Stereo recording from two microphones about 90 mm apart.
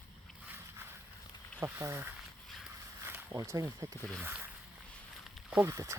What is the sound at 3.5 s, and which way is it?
Speech, 40° right (ahead or behind).